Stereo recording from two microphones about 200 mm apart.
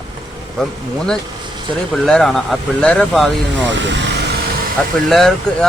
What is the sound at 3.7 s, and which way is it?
Speech, 65° right (ahead or behind).